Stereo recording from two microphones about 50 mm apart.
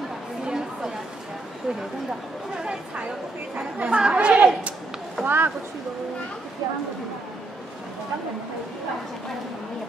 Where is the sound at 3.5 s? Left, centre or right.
Right.